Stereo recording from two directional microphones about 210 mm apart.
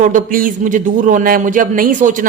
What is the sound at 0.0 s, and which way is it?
Speech, 40° right (ahead or behind).